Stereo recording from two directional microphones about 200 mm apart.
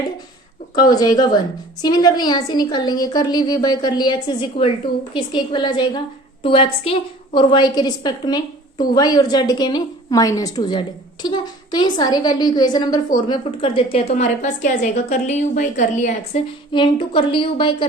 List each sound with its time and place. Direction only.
0.8 s a woman's voice: 20° left (ahead or behind); by 16.4 s 35° left (ahead or behind)
16.7 s a woman's voice: 25° left (ahead or behind)